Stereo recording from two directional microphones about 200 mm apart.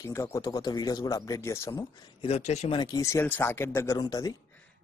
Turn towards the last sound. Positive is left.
turn(degrees=20)  # may be behind; listen again after turning